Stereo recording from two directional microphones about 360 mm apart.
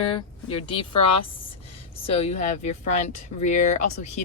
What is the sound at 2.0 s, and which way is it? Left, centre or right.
Speech, centre.